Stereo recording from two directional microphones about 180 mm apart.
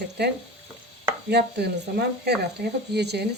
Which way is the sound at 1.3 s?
65° right (ahead or behind).